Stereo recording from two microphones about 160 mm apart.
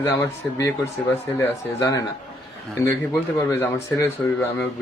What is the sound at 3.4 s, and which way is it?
Speech, 15° left (ahead or behind).